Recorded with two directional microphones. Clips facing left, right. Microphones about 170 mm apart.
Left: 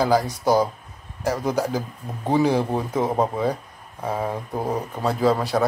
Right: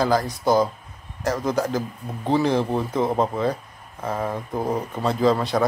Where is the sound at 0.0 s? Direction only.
10° left (ahead or behind).